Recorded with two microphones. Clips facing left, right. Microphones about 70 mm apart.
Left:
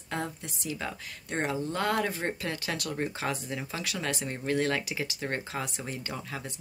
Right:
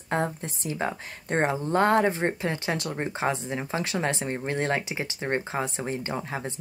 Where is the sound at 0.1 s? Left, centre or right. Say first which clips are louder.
Right 7 dB; right.